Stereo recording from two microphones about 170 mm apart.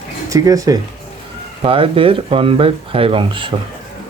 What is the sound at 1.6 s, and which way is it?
Speech, 30° right (ahead or behind).